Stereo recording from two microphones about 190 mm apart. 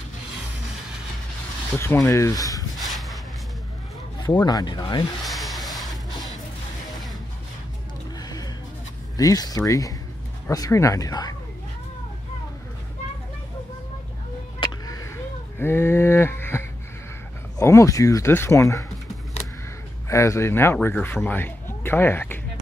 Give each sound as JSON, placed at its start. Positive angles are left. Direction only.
{"t": 1.8, "sound": "speech", "side_deg": 15}
{"t": 2.8, "sound": "a sound", "side_deg": 0}
{"t": 4.4, "sound": "speech", "side_deg": 20}
{"t": 5.2, "sound": "rub", "side_deg": 0}
{"t": 8.2, "sound": "music", "side_deg": 20}
{"t": 9.1, "sound": "speech", "side_deg": 20}
{"t": 14.6, "sound": "a sound", "side_deg": 20}
{"t": 15.6, "sound": "speech", "side_deg": 10}
{"t": 20.1, "sound": "speech", "side_deg": 15}